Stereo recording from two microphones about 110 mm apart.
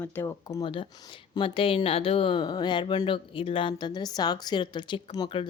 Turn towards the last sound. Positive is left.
turn(degrees=40)  # may be behind; listen again after turning